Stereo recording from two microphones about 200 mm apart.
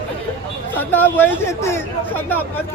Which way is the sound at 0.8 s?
10° left (ahead or behind).